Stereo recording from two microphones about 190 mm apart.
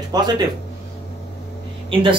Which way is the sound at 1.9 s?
25° right (ahead or behind).